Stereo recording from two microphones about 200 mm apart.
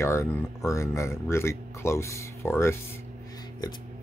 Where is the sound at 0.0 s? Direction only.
15° left (ahead or behind).